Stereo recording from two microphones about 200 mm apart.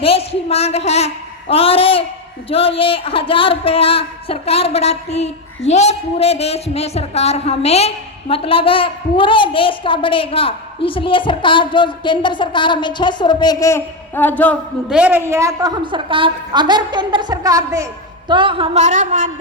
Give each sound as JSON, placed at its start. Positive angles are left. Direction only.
{"t": 0.0, "sound": "a woman's voice", "side_deg": 30}
{"t": 14.8, "sound": "a woman's voice", "side_deg": -5}